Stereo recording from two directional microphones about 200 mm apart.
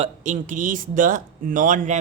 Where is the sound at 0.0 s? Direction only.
40° right (ahead or behind).